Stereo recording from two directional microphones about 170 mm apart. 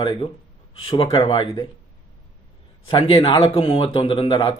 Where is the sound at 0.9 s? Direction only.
30° left (ahead or behind).